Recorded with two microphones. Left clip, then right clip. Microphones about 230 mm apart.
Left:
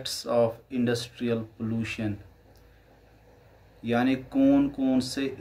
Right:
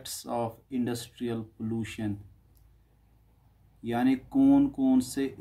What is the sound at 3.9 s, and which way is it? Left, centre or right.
Speech, right.